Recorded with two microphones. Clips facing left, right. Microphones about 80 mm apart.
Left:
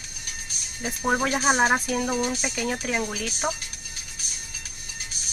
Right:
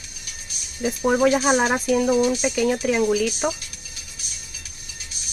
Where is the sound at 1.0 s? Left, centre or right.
Centre.